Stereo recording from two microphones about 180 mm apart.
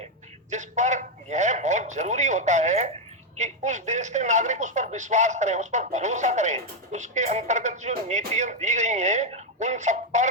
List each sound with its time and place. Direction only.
0.5 s speech: 40° right (ahead or behind)